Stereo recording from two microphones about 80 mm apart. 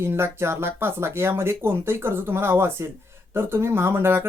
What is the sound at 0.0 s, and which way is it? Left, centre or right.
Speech, right.